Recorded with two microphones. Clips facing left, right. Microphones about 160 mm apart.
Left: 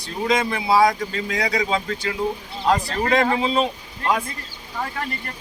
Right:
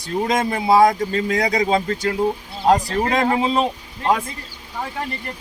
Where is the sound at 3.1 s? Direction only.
45° right (ahead or behind).